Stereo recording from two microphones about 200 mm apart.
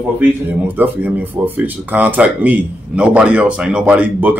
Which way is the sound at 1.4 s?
10° right (ahead or behind).